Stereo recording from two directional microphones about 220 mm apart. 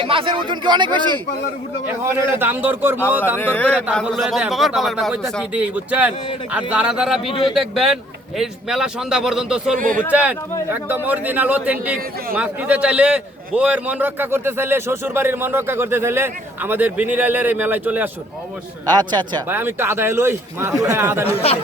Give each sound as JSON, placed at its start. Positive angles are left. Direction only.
{"t": 0.0, "sound": "speech", "side_deg": -25}
{"t": 2.4, "sound": "a man's voice", "side_deg": -10}
{"t": 3.3, "sound": "a man's voice", "side_deg": 10}
{"t": 9.7, "sound": "speech", "side_deg": -35}
{"t": 10.1, "sound": "a man's voice", "side_deg": -5}
{"t": 18.9, "sound": "a man's voice", "side_deg": -20}